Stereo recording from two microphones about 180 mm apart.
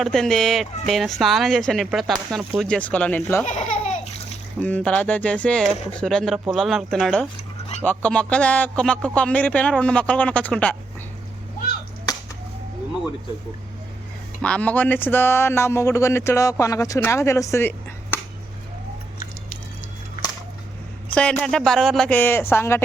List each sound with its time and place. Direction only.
0.0 s speech: centre (ahead or behind)
3.4 s laughter: 40° left (ahead or behind)
4.6 s speech: 10° left (ahead or behind)
14.4 s speech: 5° left (ahead or behind)
21.2 s speech: 5° left (ahead or behind)